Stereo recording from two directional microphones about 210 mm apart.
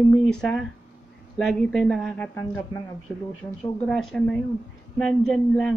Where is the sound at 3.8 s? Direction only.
5° left (ahead or behind).